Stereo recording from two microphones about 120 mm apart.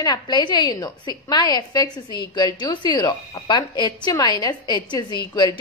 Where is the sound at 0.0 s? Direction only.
35° left (ahead or behind).